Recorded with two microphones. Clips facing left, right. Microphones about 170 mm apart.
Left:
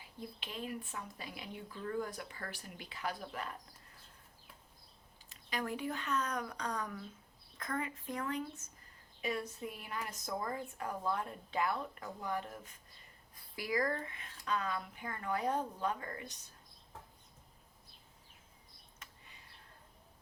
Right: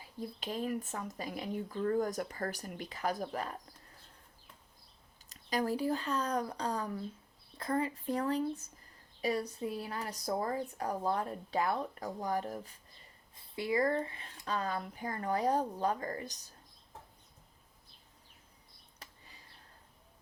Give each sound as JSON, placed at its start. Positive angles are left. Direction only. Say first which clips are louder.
{"t": 0.2, "sound": "speech", "louder": "right 7 dB", "side_deg": -40}
{"t": 5.3, "sound": "speech", "louder": "right 6 dB", "side_deg": -35}
{"t": 13.3, "sound": "speech", "louder": "right 4 dB", "side_deg": -25}
{"t": 18.9, "sound": "a sound", "louder": "right 3 dB", "side_deg": -35}